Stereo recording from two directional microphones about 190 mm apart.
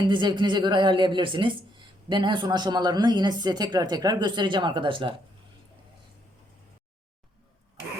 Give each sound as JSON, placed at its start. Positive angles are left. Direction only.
{"t": 0.0, "sound": "speech", "side_deg": -25}